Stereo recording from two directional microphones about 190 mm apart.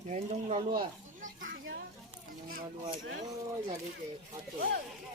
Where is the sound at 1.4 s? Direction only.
90° right.